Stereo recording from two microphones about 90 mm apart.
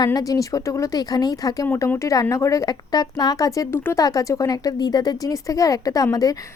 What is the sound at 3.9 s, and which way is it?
A woman's voice, 40° left (ahead or behind).